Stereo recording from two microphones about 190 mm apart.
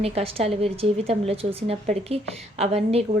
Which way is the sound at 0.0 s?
30° right (ahead or behind).